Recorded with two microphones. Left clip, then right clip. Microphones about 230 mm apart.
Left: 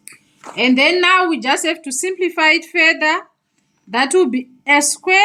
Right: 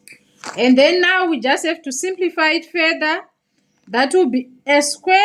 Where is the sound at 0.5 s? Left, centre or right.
Centre.